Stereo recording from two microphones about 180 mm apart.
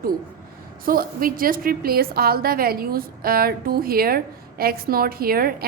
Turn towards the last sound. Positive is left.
turn(degrees=-55)  # may be behind; listen again after turning